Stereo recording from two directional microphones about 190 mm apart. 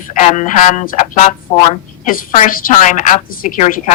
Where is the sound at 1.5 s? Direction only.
25° left (ahead or behind).